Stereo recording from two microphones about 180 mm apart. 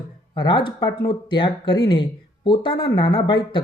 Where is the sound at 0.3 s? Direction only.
25° left (ahead or behind).